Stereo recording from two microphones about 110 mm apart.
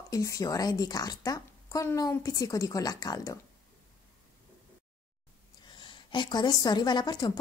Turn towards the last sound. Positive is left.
turn(degrees=40)  # may be behind; listen again after turning